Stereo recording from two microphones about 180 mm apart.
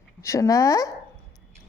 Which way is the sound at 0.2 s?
15° left (ahead or behind).